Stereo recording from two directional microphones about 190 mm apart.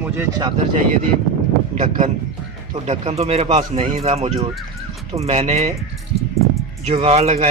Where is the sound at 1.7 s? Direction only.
40° right (ahead or behind).